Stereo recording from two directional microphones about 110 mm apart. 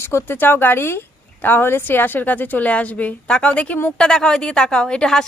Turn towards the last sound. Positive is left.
turn(degrees=5)  # may be behind; listen again after turning